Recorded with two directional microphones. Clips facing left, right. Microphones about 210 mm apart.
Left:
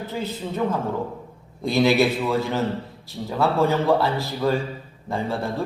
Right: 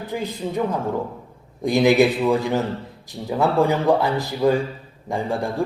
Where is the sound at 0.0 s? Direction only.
15° right (ahead or behind).